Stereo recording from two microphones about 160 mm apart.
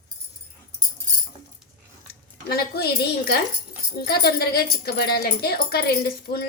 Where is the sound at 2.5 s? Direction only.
75° left (ahead or behind).